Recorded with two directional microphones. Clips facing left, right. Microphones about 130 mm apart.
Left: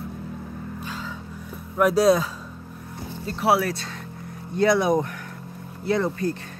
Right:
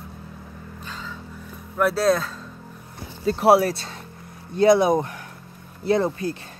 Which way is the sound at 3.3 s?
40° right (ahead or behind).